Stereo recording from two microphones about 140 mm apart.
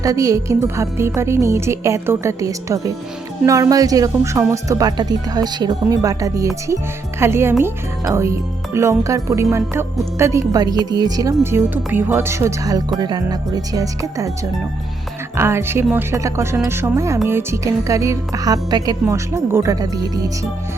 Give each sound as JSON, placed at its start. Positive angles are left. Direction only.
{"t": 0.0, "sound": "speech", "side_deg": -25}
{"t": 11.7, "sound": "speech", "side_deg": -15}
{"t": 15.4, "sound": "speech", "side_deg": -20}